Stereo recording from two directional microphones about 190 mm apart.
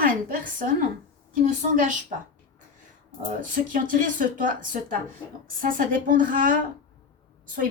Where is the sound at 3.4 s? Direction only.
45° right (ahead or behind).